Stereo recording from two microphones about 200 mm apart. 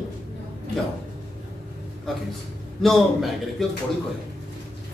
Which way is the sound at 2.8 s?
Centre (ahead or behind).